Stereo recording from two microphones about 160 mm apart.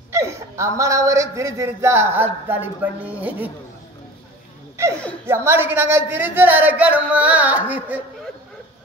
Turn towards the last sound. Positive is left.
turn(degrees=-10)  # may be behind; listen again after turning